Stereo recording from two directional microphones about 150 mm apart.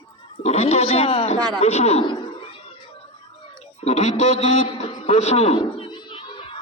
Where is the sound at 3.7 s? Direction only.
45° left (ahead or behind).